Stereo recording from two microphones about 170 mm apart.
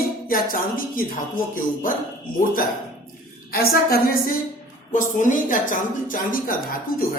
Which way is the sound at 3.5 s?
60° left (ahead or behind).